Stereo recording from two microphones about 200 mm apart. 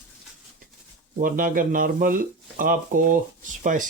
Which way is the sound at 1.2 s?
45° right (ahead or behind).